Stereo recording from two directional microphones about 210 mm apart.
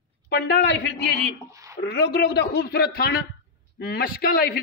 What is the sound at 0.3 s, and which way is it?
Speech, 50° left (ahead or behind).